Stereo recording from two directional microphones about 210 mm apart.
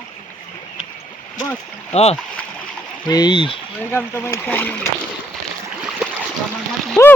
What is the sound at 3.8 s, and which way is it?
Speech, 10° left (ahead or behind).